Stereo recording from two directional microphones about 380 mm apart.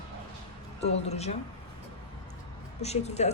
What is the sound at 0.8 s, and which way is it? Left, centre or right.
Speech, centre.